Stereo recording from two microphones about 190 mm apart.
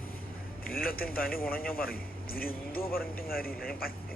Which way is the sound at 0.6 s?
50° left (ahead or behind).